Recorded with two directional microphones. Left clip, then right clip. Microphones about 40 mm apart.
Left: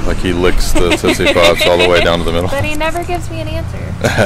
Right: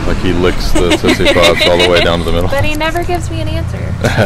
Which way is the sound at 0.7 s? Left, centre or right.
Right.